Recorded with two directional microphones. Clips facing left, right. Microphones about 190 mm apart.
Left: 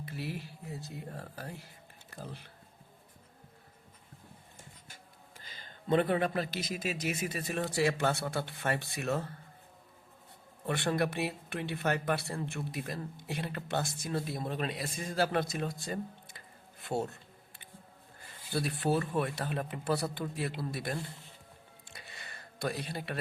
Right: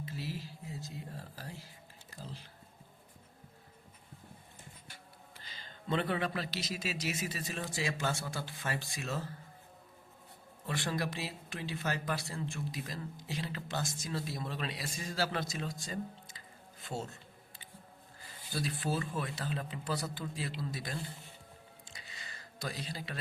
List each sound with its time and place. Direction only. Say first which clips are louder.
0.0 s speech: left 2 dB; 60° left (ahead or behind)
4.9 s speech: right 1 dB; 50° left (ahead or behind)
10.7 s speech: left 5 dB; 60° left (ahead or behind)
18.5 s speech: left 5 dB; 60° left (ahead or behind)
21.8 s music: left 4 dB; 60° left (ahead or behind)